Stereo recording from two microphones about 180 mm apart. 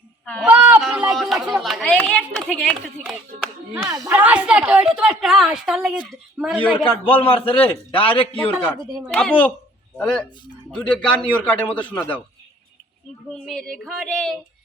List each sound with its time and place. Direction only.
0.4 s speech: 10° right (ahead or behind)
4.0 s a woman's voice: 10° right (ahead or behind)
6.7 s a man's voice: 30° left (ahead or behind)
8.6 s speech: 5° left (ahead or behind)
13.4 s speech: 5° left (ahead or behind)